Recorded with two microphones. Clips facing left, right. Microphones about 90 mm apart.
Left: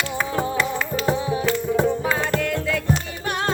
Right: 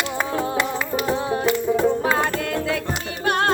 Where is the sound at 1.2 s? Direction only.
55° right (ahead or behind).